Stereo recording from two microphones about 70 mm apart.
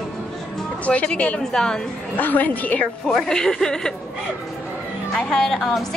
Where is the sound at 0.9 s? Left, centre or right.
Centre.